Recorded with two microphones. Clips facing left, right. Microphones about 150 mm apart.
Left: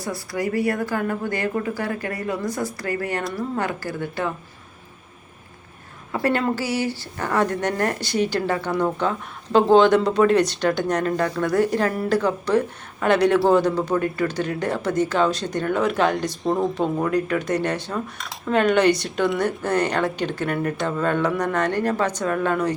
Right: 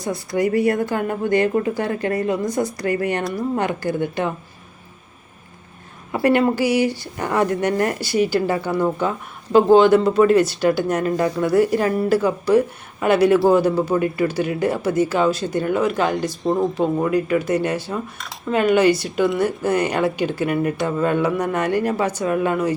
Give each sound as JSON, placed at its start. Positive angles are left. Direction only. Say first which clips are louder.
{"t": 0.0, "sound": "a woman's voice", "louder": "right 5 dB", "side_deg": -20}
{"t": 6.1, "sound": "speech", "louder": "right 5 dB", "side_deg": -15}